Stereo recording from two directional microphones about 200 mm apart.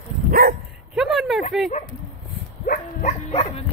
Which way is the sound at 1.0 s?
Centre (ahead or behind).